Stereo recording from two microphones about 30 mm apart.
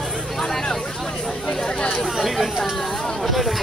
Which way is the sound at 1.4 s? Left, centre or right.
Left.